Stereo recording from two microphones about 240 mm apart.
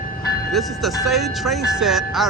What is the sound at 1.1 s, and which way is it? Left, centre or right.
Speech, centre.